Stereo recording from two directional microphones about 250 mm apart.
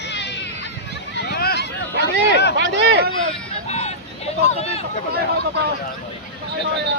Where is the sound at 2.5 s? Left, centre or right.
Right.